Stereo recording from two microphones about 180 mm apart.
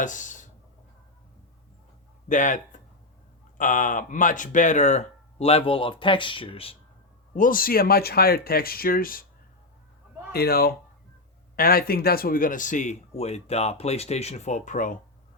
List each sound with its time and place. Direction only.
0.0 s a sound: 45° left (ahead or behind)
2.3 s speech: 45° left (ahead or behind)
7.3 s speech: 50° left (ahead or behind)
10.3 s speech: 60° left (ahead or behind); by 14.9 s 45° left (ahead or behind)